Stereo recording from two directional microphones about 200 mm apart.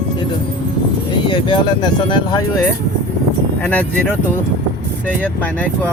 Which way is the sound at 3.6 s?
5° left (ahead or behind).